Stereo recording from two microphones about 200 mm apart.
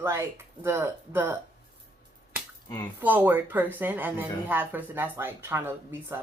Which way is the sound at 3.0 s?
10° right (ahead or behind).